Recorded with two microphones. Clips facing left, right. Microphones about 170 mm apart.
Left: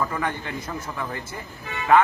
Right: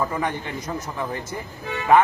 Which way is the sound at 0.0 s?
20° right (ahead or behind).